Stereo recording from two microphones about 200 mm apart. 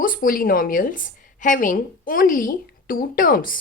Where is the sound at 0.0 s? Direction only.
45° left (ahead or behind).